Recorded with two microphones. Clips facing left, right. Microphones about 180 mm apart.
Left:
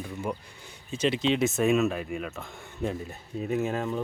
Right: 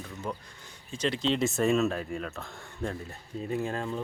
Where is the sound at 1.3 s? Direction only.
Centre (ahead or behind).